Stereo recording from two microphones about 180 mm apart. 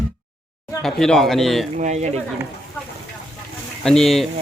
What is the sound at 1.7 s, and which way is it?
Speech, 40° right (ahead or behind).